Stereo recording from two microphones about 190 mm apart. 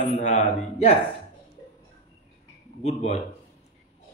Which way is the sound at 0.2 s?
40° left (ahead or behind).